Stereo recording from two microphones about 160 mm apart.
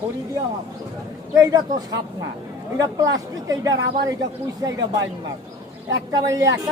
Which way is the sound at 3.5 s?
20° right (ahead or behind).